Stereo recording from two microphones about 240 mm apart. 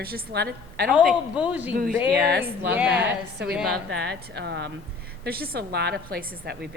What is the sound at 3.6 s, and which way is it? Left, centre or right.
A woman's voice, right.